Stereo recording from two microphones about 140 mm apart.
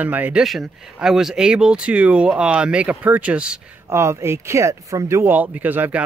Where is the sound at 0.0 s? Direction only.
10° right (ahead or behind).